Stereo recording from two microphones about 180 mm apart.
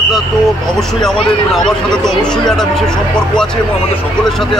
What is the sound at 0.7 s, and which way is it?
Speech, centre (ahead or behind).